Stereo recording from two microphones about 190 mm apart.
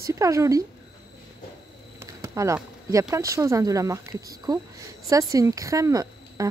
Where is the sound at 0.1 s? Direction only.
15° right (ahead or behind).